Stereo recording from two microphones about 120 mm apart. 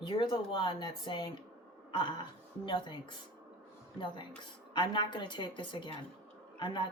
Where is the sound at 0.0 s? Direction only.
40° left (ahead or behind).